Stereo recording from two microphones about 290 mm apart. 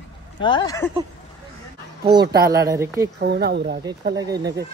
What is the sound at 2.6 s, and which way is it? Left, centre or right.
Speech, centre.